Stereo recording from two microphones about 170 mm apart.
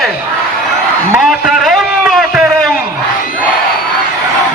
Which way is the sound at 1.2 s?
Centre (ahead or behind).